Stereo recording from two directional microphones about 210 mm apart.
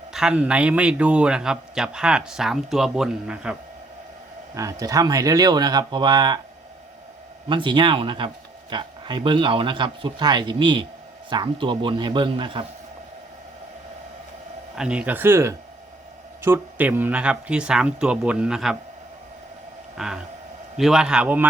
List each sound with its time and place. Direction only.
0.1 s a man's voice: 5° right (ahead or behind)
4.5 s speech: 15° right (ahead or behind)
7.4 s speech: 25° right (ahead or behind)
14.8 s a man's voice: 5° right (ahead or behind)
20.0 s a man's voice: centre (ahead or behind)